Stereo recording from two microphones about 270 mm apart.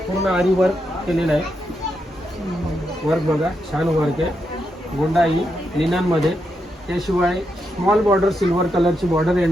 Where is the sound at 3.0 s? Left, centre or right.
Centre.